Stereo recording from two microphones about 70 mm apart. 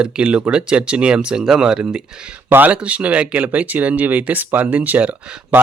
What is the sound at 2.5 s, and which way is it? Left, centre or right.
Speech, right.